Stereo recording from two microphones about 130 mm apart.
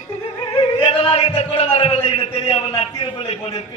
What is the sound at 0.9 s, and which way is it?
A man's voice, 45° left (ahead or behind).